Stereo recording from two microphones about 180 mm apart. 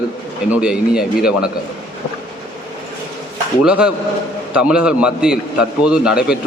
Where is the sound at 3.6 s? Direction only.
5° right (ahead or behind).